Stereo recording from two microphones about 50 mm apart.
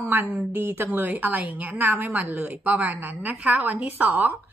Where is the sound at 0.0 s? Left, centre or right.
Right.